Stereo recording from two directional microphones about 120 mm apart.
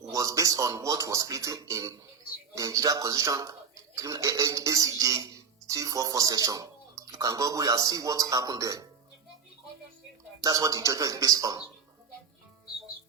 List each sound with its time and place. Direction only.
0.1 s speech: 30° right (ahead or behind)
10.4 s speech: 30° right (ahead or behind)